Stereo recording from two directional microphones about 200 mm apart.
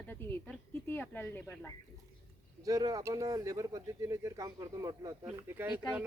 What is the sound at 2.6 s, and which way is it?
Speech, 20° right (ahead or behind).